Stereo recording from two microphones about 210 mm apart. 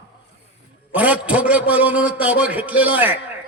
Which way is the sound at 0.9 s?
5° right (ahead or behind).